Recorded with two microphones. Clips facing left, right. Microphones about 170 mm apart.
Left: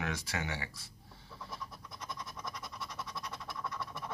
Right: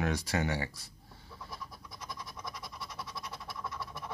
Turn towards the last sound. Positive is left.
turn(degrees=-5)  # may be behind; listen again after turning